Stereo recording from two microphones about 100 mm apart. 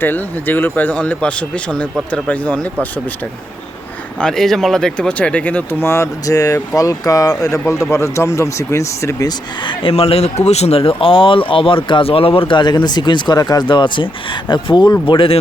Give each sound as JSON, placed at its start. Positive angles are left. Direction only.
{"t": 0.0, "sound": "speech", "side_deg": 20}
{"t": 4.2, "sound": "speech", "side_deg": 5}
{"t": 9.6, "sound": "speech", "side_deg": 75}
{"t": 15.0, "sound": "speech", "side_deg": 60}